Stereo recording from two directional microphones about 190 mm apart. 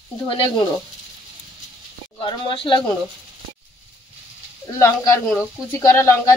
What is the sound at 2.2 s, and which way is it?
Speech, 25° left (ahead or behind).